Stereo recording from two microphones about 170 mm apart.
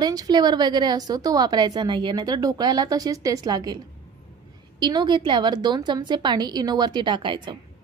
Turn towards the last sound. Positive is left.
turn(degrees=-30)  # may be behind; listen again after turning